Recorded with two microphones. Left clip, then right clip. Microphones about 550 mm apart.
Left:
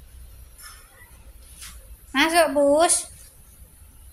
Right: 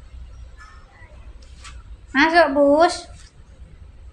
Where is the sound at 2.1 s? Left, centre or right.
Left.